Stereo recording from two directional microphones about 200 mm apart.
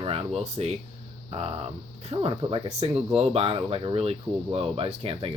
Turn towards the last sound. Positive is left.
turn(degrees=-30)  # may be behind; listen again after turning